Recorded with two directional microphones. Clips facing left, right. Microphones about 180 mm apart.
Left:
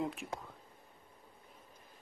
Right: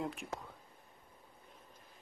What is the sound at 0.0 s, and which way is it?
Speech, centre (ahead or behind).